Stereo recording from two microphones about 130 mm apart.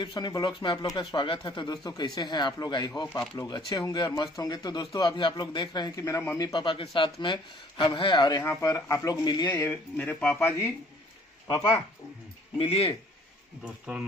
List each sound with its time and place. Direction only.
0.0 s speech: 35° left (ahead or behind)
3.1 s speech: 20° left (ahead or behind)
3.4 s speech: 35° left (ahead or behind)
6.3 s speech: 35° left (ahead or behind)
9.5 s speech: 15° left (ahead or behind)
12.5 s a man's voice: 50° left (ahead or behind)
13.6 s speech: 5° right (ahead or behind)